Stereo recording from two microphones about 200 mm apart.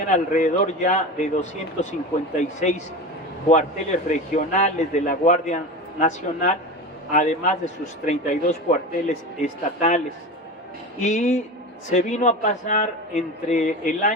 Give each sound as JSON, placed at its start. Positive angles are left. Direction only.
{"t": 0.1, "sound": "a man's voice", "side_deg": 40}
{"t": 11.0, "sound": "a man's voice", "side_deg": 35}